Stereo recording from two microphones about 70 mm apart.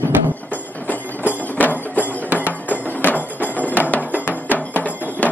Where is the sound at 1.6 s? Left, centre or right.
Left.